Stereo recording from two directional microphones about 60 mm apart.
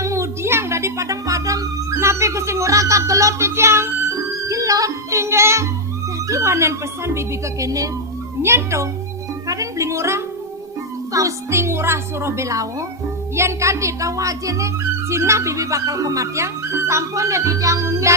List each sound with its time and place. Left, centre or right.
0.0 s music: right
2.0 s speech: right
4.4 s music: right
6.2 s speech: right
8.4 s speech: right
9.5 s speech: right
11.1 s speech: right
15.1 s speech: right
16.7 s speech: right